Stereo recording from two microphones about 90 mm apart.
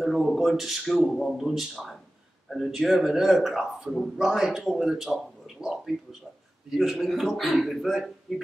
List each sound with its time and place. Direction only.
0.0 s a man's voice: centre (ahead or behind)